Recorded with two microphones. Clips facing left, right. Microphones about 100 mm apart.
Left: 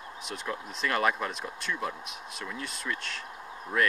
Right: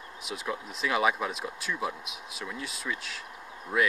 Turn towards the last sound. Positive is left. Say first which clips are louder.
# right 1 dB
turn(degrees=-5)  # may be behind; listen again after turning